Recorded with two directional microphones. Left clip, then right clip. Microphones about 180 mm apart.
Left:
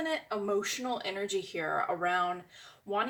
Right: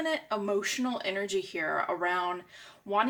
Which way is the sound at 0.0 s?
40° right (ahead or behind).